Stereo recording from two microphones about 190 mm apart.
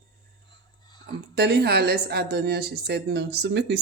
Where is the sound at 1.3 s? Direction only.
55° right (ahead or behind).